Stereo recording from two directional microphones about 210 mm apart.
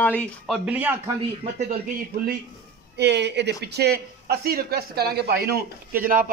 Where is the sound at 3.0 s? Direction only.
55° right (ahead or behind).